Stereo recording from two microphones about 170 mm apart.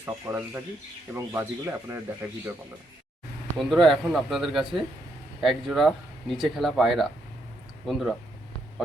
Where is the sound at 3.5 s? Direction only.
Centre (ahead or behind).